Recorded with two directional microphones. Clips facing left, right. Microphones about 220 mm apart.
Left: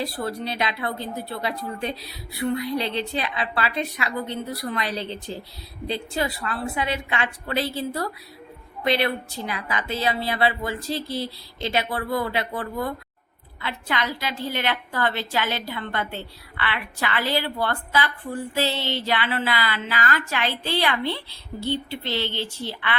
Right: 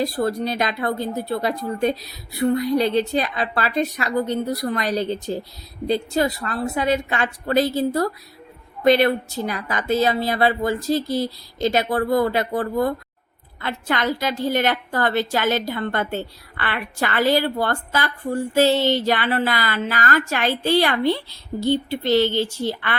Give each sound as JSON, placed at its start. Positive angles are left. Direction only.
{"t": 0.0, "sound": "a woman's voice", "side_deg": -45}